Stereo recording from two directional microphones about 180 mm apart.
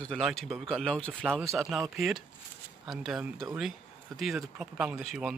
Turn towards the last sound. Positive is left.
turn(degrees=0)  # may be behind; listen again after turning